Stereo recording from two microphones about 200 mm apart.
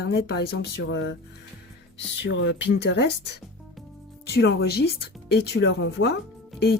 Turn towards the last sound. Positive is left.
turn(degrees=50)  # may be behind; listen again after turning